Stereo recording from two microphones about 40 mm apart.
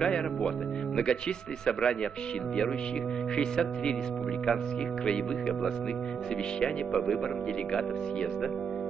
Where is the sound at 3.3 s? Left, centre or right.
Left.